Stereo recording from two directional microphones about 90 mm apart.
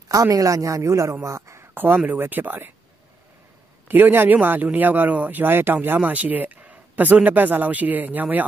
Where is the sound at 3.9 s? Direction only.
25° right (ahead or behind).